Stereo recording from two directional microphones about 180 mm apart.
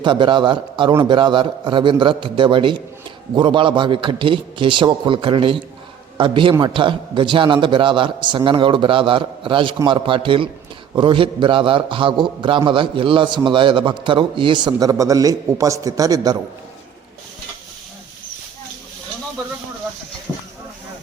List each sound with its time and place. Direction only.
0.0 s a man's voice: 25° right (ahead or behind)